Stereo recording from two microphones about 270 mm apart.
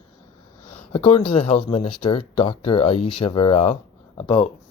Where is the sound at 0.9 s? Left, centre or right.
Centre.